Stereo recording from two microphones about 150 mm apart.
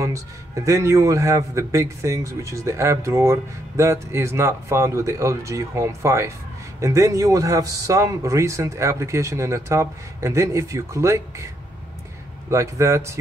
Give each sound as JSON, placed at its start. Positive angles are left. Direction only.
{"t": 0.7, "sound": "a man's voice", "side_deg": -20}
{"t": 12.4, "sound": "a man's voice", "side_deg": -20}